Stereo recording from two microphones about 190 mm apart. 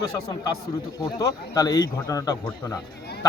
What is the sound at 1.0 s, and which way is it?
A man's voice, 20° left (ahead or behind).